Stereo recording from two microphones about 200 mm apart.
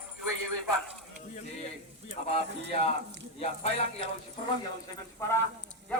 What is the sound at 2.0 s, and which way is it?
Speech, 30° left (ahead or behind).